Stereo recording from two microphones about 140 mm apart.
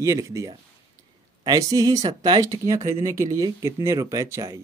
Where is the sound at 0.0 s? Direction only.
20° right (ahead or behind).